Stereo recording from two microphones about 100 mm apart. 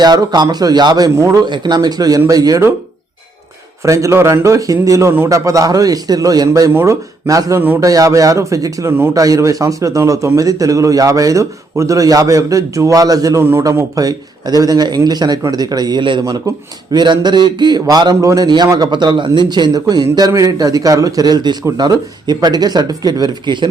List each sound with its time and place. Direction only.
0.0 s a man's voice: 45° right (ahead or behind)
1.5 s a man's voice: 45° right (ahead or behind)
3.8 s a man's voice: 30° right (ahead or behind)